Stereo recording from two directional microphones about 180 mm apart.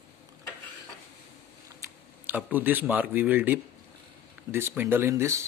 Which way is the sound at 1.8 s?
10° right (ahead or behind).